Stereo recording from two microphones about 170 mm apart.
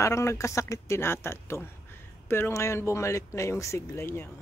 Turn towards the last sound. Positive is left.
turn(degrees=15)  # may be behind; listen again after turning